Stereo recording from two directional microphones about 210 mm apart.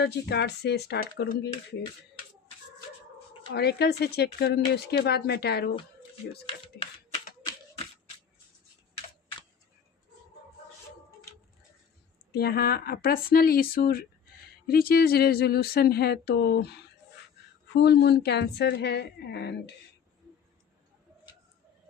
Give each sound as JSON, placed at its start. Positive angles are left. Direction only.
{"t": 0.0, "sound": "speech", "side_deg": 55}
{"t": 3.5, "sound": "speech", "side_deg": 50}
{"t": 6.8, "sound": "speech", "side_deg": 50}
{"t": 12.3, "sound": "speech", "side_deg": 50}
{"t": 17.7, "sound": "speech", "side_deg": 50}